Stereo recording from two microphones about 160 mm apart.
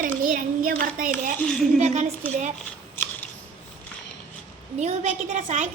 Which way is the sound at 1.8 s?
45° right (ahead or behind).